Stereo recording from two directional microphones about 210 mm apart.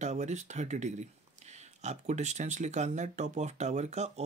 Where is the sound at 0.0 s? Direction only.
35° right (ahead or behind).